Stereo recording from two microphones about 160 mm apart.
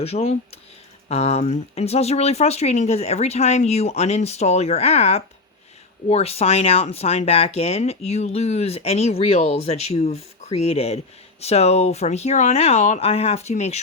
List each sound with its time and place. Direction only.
0.0 s speech: 40° left (ahead or behind)